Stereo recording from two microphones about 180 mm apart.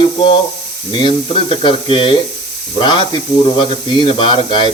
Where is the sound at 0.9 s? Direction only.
25° left (ahead or behind).